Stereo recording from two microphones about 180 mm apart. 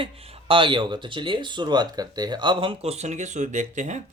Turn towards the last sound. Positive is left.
turn(degrees=-40)  # may be behind; listen again after turning